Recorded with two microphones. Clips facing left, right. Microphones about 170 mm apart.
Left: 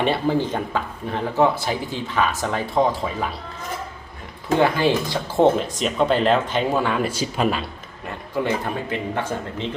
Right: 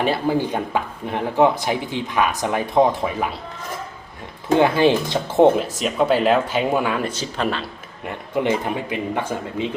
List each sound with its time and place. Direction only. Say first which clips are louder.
0.0 s speech: even; 5° right (ahead or behind)
4.6 s speech: right 2 dB; 20° right (ahead or behind)
5.5 s speech: right 1 dB; 5° right (ahead or behind)
7.0 s speech: left 2 dB; 10° left (ahead or behind)
8.0 s speech: right 3 dB; 20° right (ahead or behind)